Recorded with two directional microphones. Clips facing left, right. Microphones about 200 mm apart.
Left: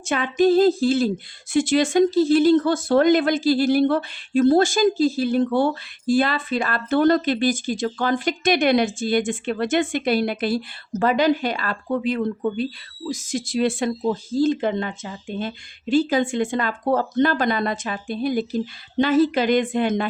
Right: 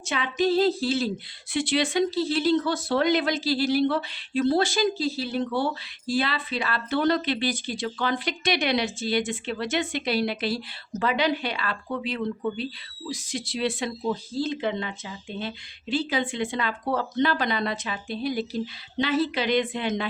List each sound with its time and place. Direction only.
0.0 s speech: 50° left (ahead or behind)